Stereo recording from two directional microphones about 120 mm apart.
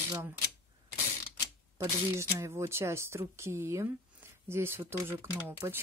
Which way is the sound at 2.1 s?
20° right (ahead or behind).